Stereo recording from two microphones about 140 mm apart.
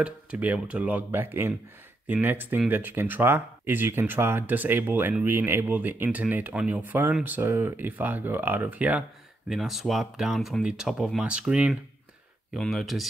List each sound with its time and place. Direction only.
0.0 s speech: 10° right (ahead or behind)